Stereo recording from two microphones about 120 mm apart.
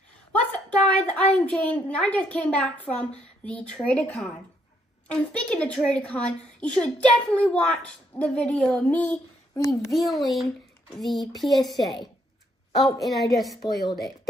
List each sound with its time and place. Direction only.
0.3 s a woman's voice: 10° left (ahead or behind)
9.6 s a child's voice: 25° left (ahead or behind)
9.9 s a child's voice: centre (ahead or behind)
13.0 s a child's voice: centre (ahead or behind)
13.6 s a woman's voice: 35° left (ahead or behind)